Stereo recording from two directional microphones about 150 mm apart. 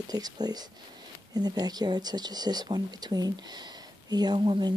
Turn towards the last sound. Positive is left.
turn(degrees=-30)  # may be behind; listen again after turning